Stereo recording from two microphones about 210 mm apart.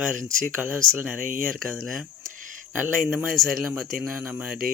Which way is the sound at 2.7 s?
10° right (ahead or behind).